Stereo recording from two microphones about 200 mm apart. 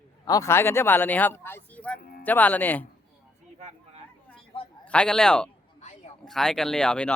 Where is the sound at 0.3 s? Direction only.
15° left (ahead or behind).